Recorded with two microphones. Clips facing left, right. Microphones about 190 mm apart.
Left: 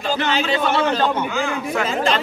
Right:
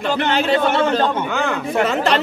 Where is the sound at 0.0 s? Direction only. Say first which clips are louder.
Right 2 dB; 60° right (ahead or behind).